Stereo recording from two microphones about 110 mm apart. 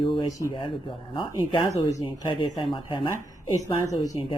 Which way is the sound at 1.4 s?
50° left (ahead or behind).